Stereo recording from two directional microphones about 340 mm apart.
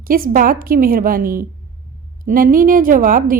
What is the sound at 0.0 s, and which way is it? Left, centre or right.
A woman's voice, right.